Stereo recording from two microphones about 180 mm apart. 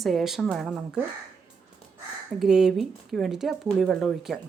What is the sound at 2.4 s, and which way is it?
Speech, 5° right (ahead or behind).